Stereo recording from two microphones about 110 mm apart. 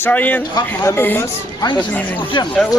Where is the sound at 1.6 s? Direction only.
40° left (ahead or behind).